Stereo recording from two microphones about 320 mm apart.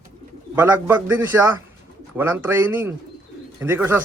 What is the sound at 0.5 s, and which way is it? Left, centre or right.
A man's voice, centre.